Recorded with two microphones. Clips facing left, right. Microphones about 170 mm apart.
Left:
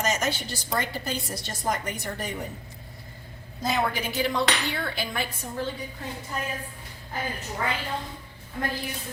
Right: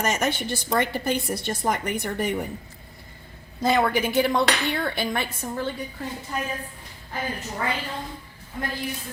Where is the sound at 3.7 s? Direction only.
60° right (ahead or behind).